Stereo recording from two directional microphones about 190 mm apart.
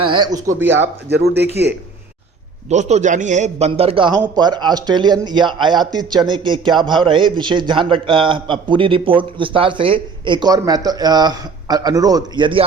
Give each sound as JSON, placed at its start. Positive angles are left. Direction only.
{"t": 0.0, "sound": "a sound", "side_deg": -25}
{"t": 0.3, "sound": "speech", "side_deg": -15}
{"t": 1.1, "sound": "speech", "side_deg": -60}
{"t": 2.6, "sound": "a man's voice", "side_deg": -35}